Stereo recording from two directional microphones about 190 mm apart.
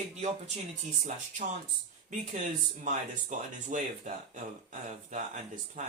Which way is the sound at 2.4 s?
40° right (ahead or behind).